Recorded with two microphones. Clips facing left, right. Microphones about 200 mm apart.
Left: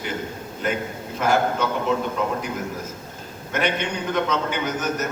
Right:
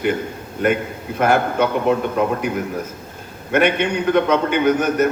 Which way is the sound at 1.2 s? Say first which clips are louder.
Right 4 dB; 60° right (ahead or behind).